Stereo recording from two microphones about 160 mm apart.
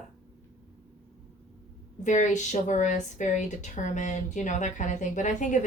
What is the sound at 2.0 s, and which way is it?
A woman's voice, 50° left (ahead or behind).